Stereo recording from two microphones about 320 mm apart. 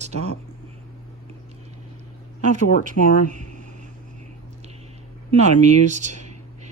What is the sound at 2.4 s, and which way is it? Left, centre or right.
Speech, right.